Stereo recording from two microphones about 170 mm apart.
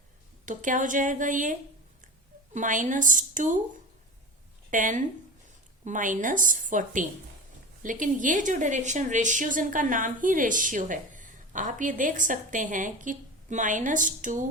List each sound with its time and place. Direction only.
0.4 s speech: 50° right (ahead or behind)
4.7 s speech: 50° right (ahead or behind)